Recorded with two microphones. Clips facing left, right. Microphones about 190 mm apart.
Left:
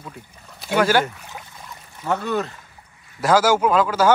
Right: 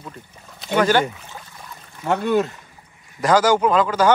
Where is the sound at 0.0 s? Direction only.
5° left (ahead or behind).